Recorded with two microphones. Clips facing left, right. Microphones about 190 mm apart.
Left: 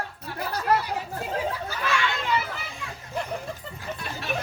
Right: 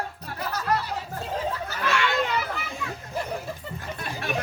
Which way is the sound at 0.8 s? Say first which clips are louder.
Left 1 dB; 10° left (ahead or behind).